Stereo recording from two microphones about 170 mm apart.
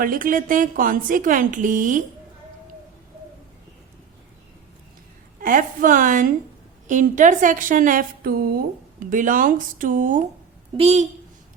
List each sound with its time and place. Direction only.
0.0 s a woman's voice: 55° right (ahead or behind)
5.4 s a woman's voice: 55° right (ahead or behind)
10.8 s a woman's voice: 40° right (ahead or behind)